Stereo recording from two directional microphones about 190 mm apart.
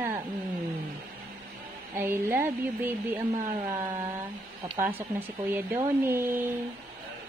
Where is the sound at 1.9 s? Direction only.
10° right (ahead or behind).